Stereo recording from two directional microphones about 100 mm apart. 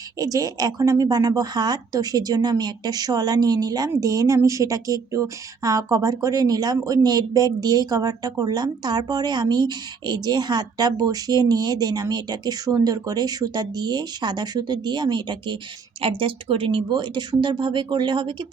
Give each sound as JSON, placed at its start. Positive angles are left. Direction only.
{"t": 0.2, "sound": "speech", "side_deg": -35}
{"t": 16.0, "sound": "speech", "side_deg": -60}